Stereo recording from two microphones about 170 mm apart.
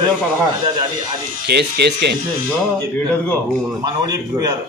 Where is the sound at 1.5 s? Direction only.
75° right (ahead or behind).